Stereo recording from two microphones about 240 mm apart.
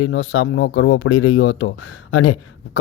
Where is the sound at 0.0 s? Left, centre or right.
Left.